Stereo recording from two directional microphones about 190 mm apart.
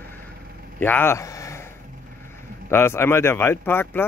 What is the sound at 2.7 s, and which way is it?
Speech, 10° left (ahead or behind).